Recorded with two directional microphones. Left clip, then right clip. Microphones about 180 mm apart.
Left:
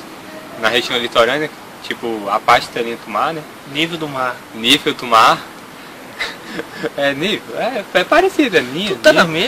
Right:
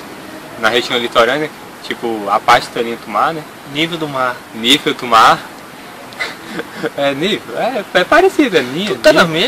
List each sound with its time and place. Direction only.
0.6 s speech: 5° left (ahead or behind)
3.7 s speech: 15° right (ahead or behind)
4.6 s speech: 5° left (ahead or behind)
9.0 s speech: 15° right (ahead or behind)